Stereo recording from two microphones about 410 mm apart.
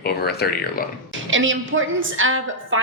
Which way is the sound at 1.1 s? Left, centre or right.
Right.